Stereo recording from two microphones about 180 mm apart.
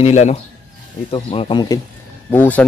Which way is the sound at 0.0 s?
35° left (ahead or behind).